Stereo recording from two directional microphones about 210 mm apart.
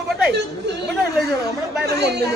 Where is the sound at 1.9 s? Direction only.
50° right (ahead or behind).